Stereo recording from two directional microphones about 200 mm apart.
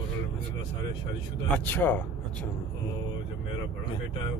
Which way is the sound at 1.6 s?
10° left (ahead or behind).